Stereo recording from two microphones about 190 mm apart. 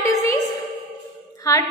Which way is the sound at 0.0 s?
15° left (ahead or behind).